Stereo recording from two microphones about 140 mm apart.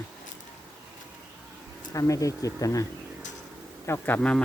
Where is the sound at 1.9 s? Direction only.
25° left (ahead or behind).